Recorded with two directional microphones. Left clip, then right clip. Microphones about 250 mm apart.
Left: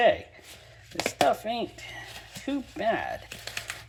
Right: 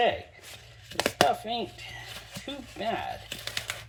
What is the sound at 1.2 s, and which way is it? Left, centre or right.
A woman's voice, centre.